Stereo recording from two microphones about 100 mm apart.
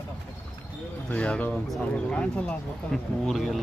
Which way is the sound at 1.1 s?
10° left (ahead or behind).